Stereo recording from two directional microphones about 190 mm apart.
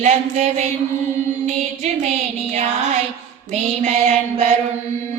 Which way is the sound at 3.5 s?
35° right (ahead or behind).